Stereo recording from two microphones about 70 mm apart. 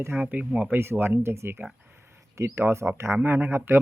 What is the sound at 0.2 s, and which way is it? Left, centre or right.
Speech, right.